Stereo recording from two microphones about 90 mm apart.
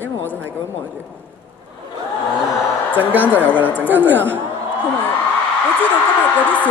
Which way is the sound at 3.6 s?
20° left (ahead or behind).